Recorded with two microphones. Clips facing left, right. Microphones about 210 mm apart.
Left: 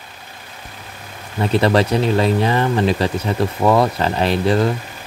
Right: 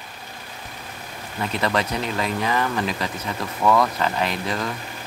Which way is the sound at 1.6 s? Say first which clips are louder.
Left 7 dB; 30° left (ahead or behind).